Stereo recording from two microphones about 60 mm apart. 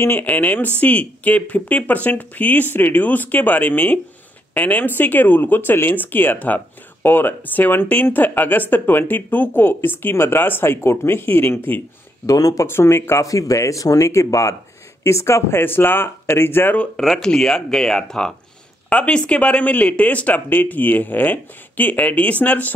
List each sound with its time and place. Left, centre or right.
0.2 s speech: left
12.3 s speech: left
12.6 s speech: left
13.2 s speech: left
17.0 s speech: centre; by 22.7 s left